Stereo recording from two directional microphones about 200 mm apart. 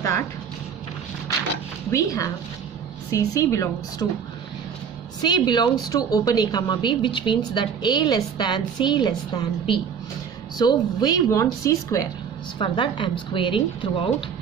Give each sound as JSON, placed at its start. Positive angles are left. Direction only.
{"t": 1.9, "sound": "a woman's voice", "side_deg": 15}
{"t": 5.2, "sound": "a woman's voice", "side_deg": 20}